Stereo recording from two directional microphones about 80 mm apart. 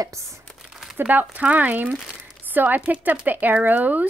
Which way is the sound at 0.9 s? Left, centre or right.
Right.